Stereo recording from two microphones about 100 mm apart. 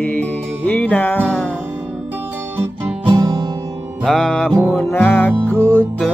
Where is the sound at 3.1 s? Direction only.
35° right (ahead or behind).